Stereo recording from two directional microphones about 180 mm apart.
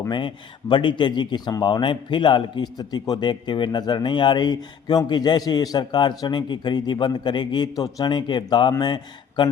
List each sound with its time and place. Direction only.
0.1 s speech: 25° left (ahead or behind)